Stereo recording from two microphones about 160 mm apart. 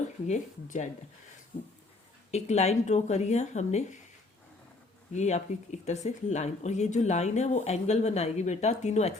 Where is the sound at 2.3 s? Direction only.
45° left (ahead or behind).